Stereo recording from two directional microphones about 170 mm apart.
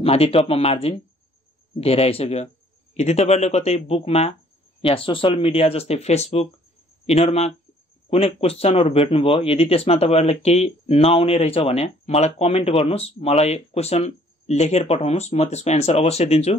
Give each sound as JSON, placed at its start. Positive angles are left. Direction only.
{"t": 0.0, "sound": "speech", "side_deg": 35}